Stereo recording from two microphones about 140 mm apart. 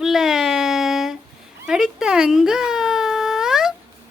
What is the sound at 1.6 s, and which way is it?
Whimper, 5° right (ahead or behind).